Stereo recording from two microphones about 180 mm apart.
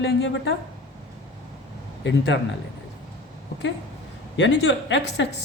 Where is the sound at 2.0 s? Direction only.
80° left.